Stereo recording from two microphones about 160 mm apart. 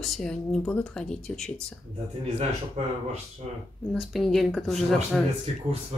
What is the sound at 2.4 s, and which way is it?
Speech, 40° right (ahead or behind).